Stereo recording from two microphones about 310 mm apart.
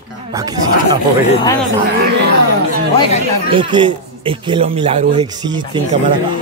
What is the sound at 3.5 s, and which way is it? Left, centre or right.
Speech, centre.